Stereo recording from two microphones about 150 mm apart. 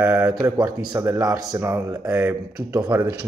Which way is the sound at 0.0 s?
15° right (ahead or behind).